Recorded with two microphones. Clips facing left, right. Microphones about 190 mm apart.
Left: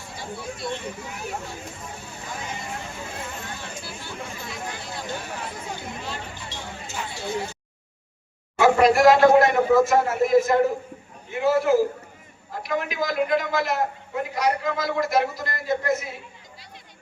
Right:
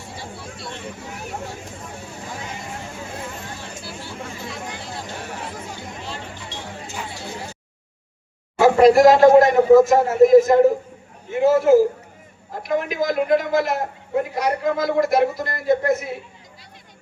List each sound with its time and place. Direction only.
8.5 s a man's voice: 35° right (ahead or behind); by 16.1 s 55° right (ahead or behind)